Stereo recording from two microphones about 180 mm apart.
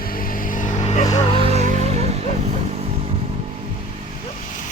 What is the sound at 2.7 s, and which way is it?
Motorcycle, 35° right (ahead or behind).